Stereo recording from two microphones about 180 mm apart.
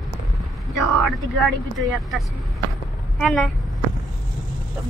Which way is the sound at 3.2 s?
Centre (ahead or behind).